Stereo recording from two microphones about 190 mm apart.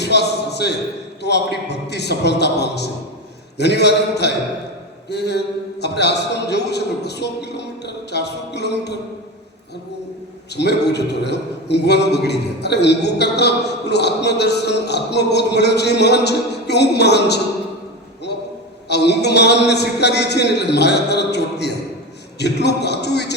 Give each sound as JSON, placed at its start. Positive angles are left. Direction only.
{"t": 0.0, "sound": "a sound", "side_deg": 60}
{"t": 1.2, "sound": "a man's voice", "side_deg": 65}
{"t": 10.5, "sound": "a man's voice", "side_deg": 60}
{"t": 18.9, "sound": "a man's voice", "side_deg": 60}